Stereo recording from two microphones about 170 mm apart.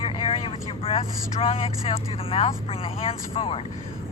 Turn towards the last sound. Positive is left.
turn(degrees=35)  # may be behind; listen again after turning